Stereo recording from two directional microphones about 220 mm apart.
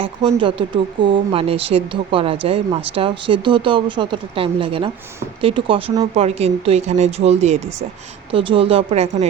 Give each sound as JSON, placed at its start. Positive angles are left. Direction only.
{"t": 0.0, "sound": "speech", "side_deg": -25}